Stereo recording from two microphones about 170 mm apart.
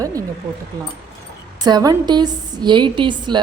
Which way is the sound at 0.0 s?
20° right (ahead or behind).